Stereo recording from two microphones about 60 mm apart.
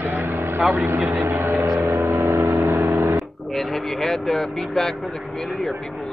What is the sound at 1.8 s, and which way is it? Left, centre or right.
Vehicle, right.